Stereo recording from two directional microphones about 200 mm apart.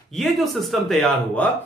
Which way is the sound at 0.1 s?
Centre (ahead or behind).